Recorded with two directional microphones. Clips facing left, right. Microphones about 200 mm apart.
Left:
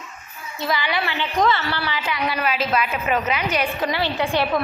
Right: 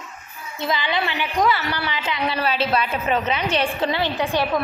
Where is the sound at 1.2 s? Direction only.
10° right (ahead or behind).